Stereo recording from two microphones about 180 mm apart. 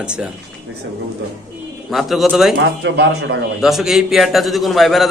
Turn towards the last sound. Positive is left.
turn(degrees=0)  # may be behind; listen again after turning